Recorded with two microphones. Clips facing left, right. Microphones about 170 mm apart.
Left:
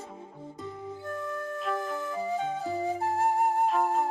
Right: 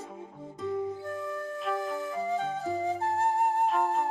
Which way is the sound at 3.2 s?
20° left (ahead or behind).